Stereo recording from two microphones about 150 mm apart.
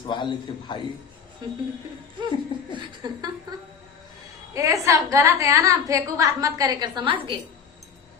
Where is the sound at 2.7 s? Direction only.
30° right (ahead or behind).